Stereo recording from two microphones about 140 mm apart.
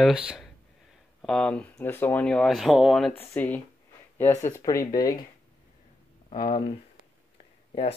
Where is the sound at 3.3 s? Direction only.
10° left (ahead or behind).